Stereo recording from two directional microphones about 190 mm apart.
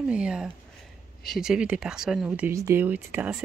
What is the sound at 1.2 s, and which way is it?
Speech, centre (ahead or behind).